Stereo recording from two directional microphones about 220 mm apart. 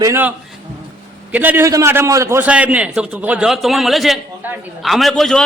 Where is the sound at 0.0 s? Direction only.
10° right (ahead or behind).